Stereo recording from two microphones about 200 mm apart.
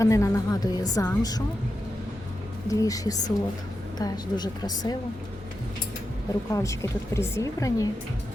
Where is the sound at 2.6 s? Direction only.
15° left (ahead or behind).